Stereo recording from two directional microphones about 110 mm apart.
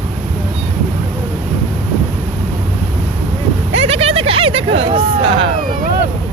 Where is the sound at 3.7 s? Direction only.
75° right (ahead or behind); by 5.5 s 50° right (ahead or behind).